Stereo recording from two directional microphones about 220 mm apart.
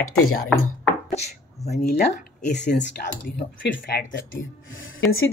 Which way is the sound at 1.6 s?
35° left (ahead or behind).